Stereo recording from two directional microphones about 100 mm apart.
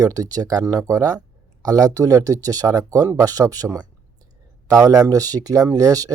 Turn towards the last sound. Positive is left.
turn(degrees=-35)  # may be behind; listen again after turning